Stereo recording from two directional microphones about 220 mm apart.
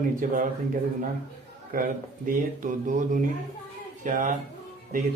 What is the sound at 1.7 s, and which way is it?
A man's voice, 40° right (ahead or behind).